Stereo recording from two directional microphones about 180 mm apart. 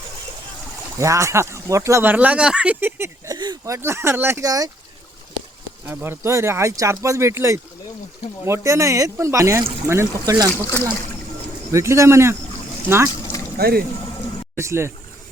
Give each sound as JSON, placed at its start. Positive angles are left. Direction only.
{"t": 0.9, "sound": "speech", "side_deg": -15}
{"t": 5.8, "sound": "speech", "side_deg": -10}
{"t": 10.7, "sound": "speech", "side_deg": 10}
{"t": 11.7, "sound": "speech", "side_deg": -15}
{"t": 13.6, "sound": "speech", "side_deg": -60}
{"t": 14.5, "sound": "speech", "side_deg": -15}